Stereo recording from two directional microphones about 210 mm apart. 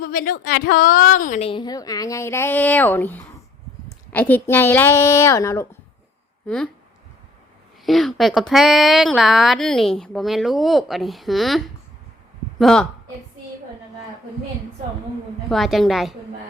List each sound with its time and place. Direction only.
0.0 s a woman's voice: 40° left (ahead or behind); by 5.6 s 15° left (ahead or behind)
7.9 s a woman's voice: centre (ahead or behind)
15.4 s speech: centre (ahead or behind)